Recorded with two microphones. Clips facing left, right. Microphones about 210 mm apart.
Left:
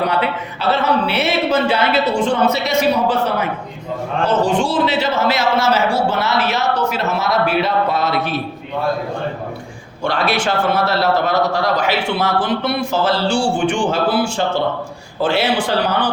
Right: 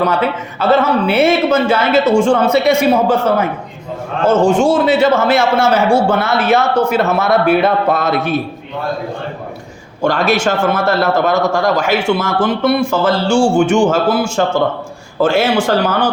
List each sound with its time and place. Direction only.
0.0 s a man's voice: 45° right (ahead or behind)
4.4 s a man's voice: 45° right (ahead or behind)
10.0 s a man's voice: 45° right (ahead or behind)